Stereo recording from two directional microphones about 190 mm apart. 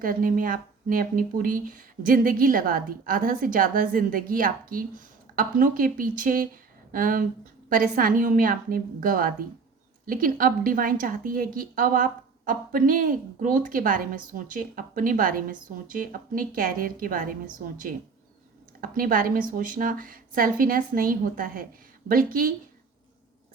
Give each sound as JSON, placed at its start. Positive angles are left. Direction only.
{"t": 0.0, "sound": "a woman's voice", "side_deg": -45}